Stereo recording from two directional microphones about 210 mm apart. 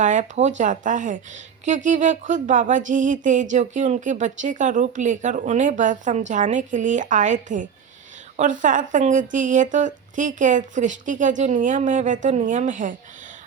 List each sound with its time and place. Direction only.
0.0 s speech: 35° right (ahead or behind)